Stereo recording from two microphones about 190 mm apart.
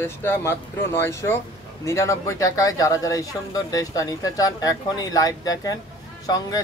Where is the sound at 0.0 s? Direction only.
15° left (ahead or behind).